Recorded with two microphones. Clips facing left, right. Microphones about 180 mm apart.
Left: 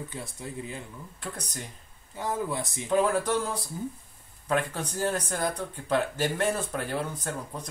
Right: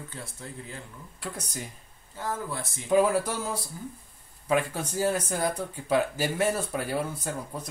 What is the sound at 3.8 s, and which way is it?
Speech, 20° left (ahead or behind).